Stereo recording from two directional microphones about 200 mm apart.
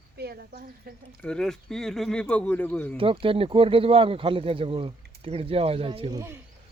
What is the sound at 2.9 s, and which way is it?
Speech, 25° right (ahead or behind).